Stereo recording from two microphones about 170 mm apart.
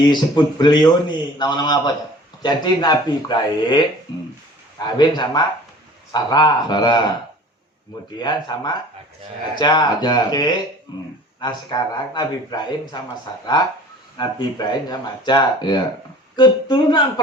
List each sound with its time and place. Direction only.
0.0 s a man's voice: 25° left (ahead or behind)
8.2 s a man's voice: 25° left (ahead or behind)
14.2 s a man's voice: 25° left (ahead or behind)